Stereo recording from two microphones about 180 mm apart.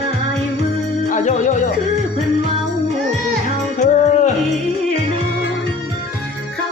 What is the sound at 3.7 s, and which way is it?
Music, 40° left (ahead or behind).